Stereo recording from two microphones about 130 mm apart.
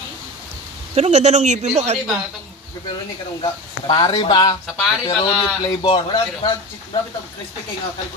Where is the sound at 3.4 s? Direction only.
35° left (ahead or behind).